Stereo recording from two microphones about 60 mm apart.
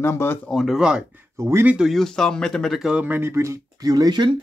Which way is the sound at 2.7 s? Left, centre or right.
Centre.